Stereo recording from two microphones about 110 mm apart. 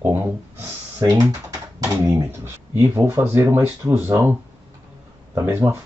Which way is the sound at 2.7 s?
20° right (ahead or behind).